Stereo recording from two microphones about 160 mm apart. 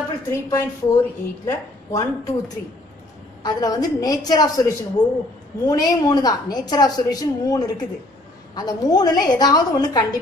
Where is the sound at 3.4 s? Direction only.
25° left (ahead or behind).